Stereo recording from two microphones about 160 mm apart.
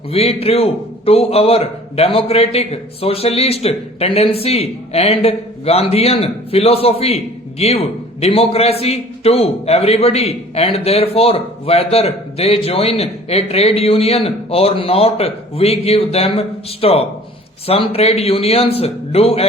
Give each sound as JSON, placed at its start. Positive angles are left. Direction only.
{"t": 0.1, "sound": "a man's voice", "side_deg": 40}